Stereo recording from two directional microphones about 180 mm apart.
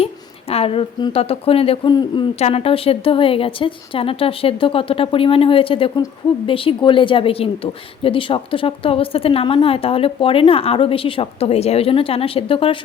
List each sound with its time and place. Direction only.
0.0 s a woman's voice: 35° left (ahead or behind)